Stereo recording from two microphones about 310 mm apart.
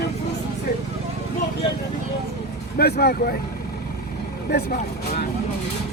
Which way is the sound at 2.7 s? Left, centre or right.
Left.